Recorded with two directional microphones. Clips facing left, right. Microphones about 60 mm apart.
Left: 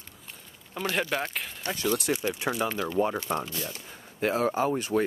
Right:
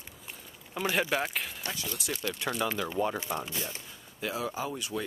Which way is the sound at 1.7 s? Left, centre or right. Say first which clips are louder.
Left 10 dB; left.